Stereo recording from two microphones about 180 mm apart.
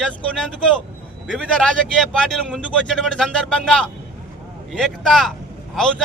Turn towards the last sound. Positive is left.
turn(degrees=0)  # may be behind; listen again after turning